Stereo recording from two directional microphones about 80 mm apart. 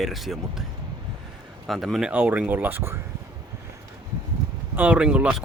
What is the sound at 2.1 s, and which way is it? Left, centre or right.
Speech, centre.